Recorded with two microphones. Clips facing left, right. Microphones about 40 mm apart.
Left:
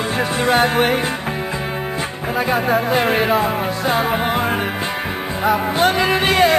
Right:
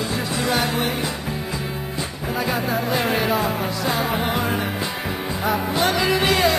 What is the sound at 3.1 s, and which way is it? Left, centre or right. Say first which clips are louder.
Music: left 4 dB; left.